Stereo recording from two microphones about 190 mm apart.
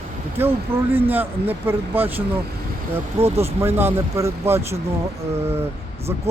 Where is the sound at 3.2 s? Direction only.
30° right (ahead or behind).